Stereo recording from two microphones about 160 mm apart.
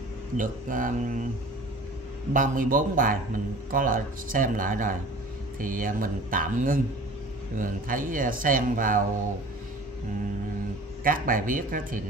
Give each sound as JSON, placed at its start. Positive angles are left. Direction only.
{"t": 0.4, "sound": "speech", "side_deg": -55}
{"t": 2.3, "sound": "speech", "side_deg": -55}
{"t": 11.1, "sound": "speech", "side_deg": -60}